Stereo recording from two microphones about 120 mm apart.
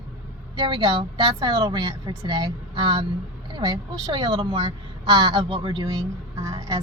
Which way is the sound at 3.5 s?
35° right (ahead or behind).